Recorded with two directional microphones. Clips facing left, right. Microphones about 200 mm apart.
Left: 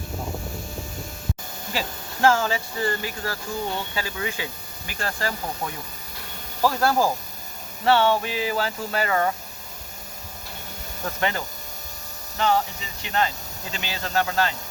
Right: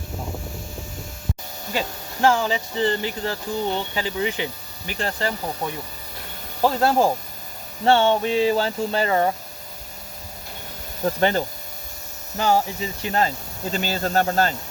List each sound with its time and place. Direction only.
2.2 s speech: 15° right (ahead or behind)
6.6 s speech: 20° right (ahead or behind)
11.0 s speech: 35° right (ahead or behind)